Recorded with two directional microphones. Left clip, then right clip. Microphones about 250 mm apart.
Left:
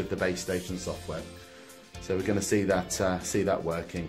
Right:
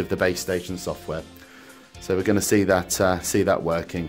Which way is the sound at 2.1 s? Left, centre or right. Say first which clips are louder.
Right 7 dB; right.